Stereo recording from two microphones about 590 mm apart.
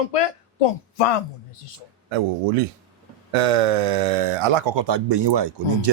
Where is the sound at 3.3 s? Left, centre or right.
Right.